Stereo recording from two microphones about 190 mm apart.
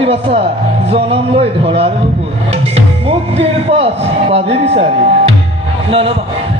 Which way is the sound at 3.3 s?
30° right (ahead or behind).